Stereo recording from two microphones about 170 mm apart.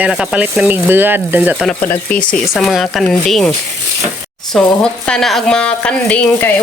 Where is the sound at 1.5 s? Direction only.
Centre (ahead or behind).